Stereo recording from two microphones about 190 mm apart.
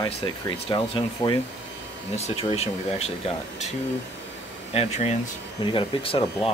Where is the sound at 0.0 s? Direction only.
25° left (ahead or behind).